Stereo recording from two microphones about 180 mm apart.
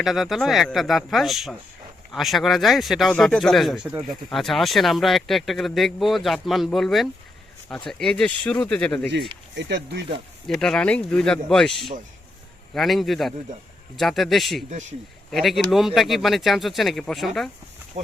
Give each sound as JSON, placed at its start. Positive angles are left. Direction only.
{"t": 0.0, "sound": "speech", "side_deg": 0}
{"t": 9.6, "sound": "speech", "side_deg": -70}
{"t": 10.4, "sound": "speech", "side_deg": 5}
{"t": 18.0, "sound": "speech", "side_deg": -40}